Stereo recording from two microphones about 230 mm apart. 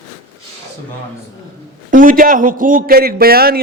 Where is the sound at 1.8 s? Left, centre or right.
Right.